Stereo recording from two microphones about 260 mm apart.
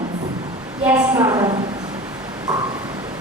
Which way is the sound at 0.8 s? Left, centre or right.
Centre.